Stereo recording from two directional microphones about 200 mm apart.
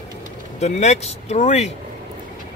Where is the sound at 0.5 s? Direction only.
35° left (ahead or behind).